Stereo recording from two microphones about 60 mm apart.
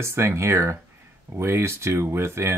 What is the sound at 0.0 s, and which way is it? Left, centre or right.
Speech, right.